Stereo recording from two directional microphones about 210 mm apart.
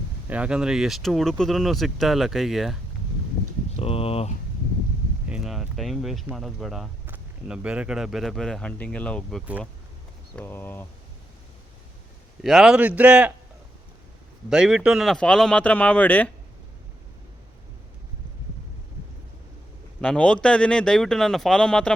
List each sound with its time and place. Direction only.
0.3 s speech: 5° right (ahead or behind)
3.8 s a sound: 25° left (ahead or behind)
5.3 s speech: centre (ahead or behind)
12.4 s speech: centre (ahead or behind)
14.5 s speech: 5° right (ahead or behind)
20.0 s speech: 5° left (ahead or behind)